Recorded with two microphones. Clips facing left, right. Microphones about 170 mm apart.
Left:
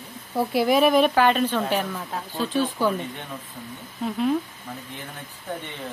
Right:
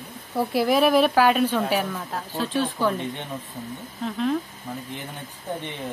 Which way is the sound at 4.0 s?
5° left (ahead or behind).